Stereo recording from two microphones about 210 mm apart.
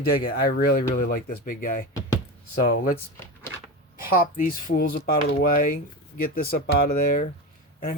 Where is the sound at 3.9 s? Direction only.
40° left (ahead or behind).